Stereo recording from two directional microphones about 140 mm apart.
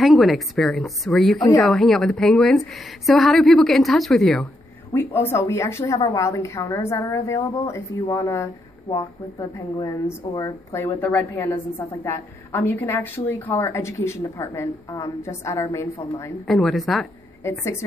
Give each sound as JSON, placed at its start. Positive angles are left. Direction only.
{"t": 0.0, "sound": "a woman's voice", "side_deg": 0}
{"t": 4.9, "sound": "a woman's voice", "side_deg": 15}
{"t": 16.4, "sound": "a woman's voice", "side_deg": 0}
{"t": 17.4, "sound": "a woman's voice", "side_deg": 20}